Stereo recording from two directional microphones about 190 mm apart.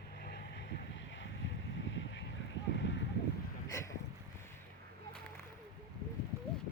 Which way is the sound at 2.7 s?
70° left (ahead or behind).